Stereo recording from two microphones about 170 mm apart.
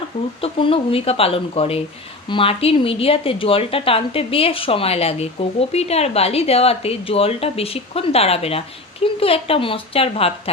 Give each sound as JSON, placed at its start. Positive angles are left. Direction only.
{"t": 0.4, "sound": "a woman's voice", "side_deg": 35}